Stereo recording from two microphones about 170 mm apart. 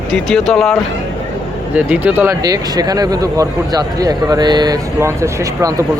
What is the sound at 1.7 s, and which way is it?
Speech, 10° right (ahead or behind).